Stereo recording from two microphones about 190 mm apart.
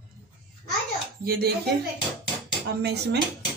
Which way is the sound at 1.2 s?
55° right (ahead or behind).